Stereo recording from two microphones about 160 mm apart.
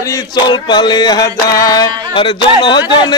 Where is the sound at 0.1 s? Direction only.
25° left (ahead or behind).